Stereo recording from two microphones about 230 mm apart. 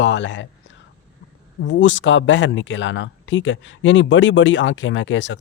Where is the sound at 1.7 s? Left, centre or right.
Left.